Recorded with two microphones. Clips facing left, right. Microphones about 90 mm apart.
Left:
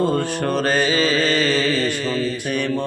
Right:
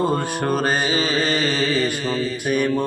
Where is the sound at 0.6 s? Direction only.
20° right (ahead or behind).